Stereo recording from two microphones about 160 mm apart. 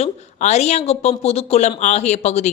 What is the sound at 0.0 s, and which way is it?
A woman's voice, 45° left (ahead or behind).